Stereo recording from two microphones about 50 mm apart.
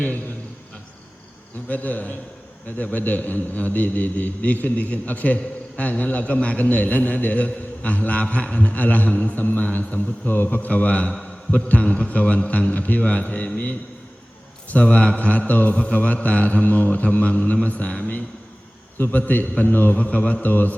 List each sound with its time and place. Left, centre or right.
1.6 s a man's voice: left
20.1 s a man's voice: left